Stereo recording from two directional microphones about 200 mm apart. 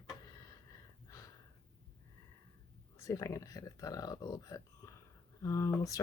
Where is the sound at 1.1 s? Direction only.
15° left (ahead or behind).